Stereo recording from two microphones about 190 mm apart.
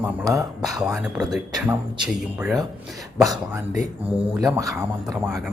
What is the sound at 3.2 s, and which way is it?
Speech, 20° right (ahead or behind).